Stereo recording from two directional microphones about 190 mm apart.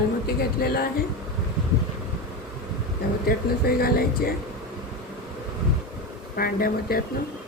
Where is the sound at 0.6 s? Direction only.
50° left (ahead or behind).